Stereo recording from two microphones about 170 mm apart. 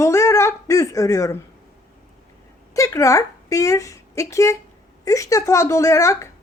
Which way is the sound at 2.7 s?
20° left (ahead or behind).